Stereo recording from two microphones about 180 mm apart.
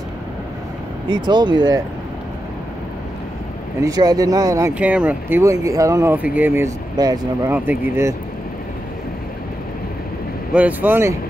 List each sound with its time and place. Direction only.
1.0 s speech: 25° right (ahead or behind)
3.8 s speech: 20° right (ahead or behind)
10.5 s speech: 10° right (ahead or behind)